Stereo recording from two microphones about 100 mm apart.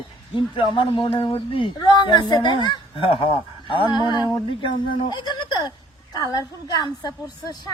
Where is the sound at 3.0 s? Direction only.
65° left (ahead or behind); by 7.5 s 40° left (ahead or behind).